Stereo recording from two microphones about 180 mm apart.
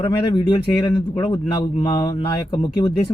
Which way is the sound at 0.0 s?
25° left (ahead or behind).